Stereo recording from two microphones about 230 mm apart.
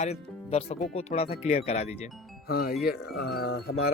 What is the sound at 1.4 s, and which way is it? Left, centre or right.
Wind chime, left.